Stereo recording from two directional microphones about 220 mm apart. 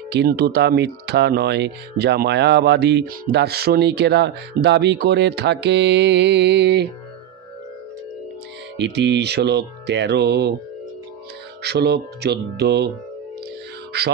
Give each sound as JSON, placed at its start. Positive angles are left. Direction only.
{"t": 0.1, "sound": "speech", "side_deg": -45}
{"t": 8.7, "sound": "speech", "side_deg": -50}
{"t": 11.6, "sound": "speech", "side_deg": -50}
{"t": 13.9, "sound": "speech", "side_deg": -50}